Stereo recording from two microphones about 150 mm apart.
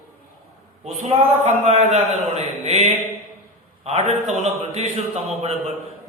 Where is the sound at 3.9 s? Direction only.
50° right (ahead or behind).